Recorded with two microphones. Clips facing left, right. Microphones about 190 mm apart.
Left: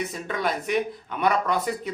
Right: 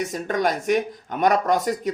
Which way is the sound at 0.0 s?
45° right (ahead or behind).